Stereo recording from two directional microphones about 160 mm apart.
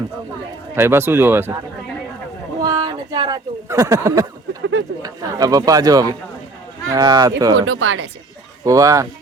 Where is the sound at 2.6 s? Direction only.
25° right (ahead or behind).